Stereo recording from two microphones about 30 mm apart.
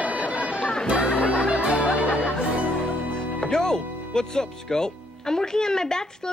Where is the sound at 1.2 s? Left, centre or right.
Left.